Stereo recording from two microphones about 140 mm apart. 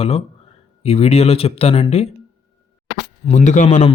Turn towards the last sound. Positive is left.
turn(degrees=60)  # may be behind; listen again after turning